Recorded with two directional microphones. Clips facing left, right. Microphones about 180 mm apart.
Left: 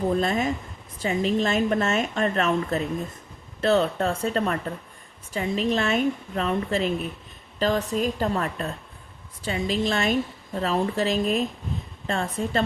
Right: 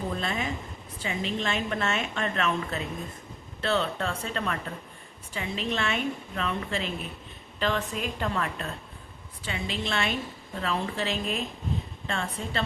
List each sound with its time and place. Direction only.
0.2 s a woman's voice: 40° left (ahead or behind)